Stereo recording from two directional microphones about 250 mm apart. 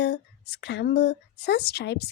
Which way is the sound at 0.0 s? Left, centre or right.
Left.